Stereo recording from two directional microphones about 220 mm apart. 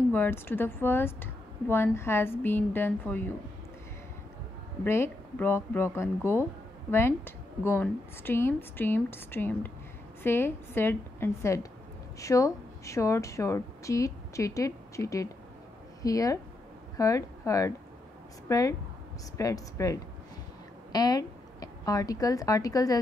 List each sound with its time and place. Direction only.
0.1 s speech: 10° left (ahead or behind)
4.8 s a woman's voice: 10° left (ahead or behind)